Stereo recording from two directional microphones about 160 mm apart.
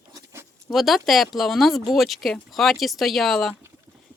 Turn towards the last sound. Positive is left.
turn(degrees=0)  # may be behind; listen again after turning